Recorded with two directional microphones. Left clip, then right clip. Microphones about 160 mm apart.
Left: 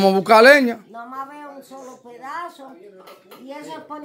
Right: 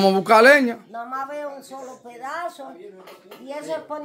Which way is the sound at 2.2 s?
30° right (ahead or behind).